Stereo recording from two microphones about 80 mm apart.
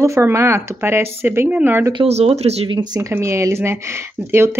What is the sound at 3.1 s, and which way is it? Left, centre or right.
Speech, right.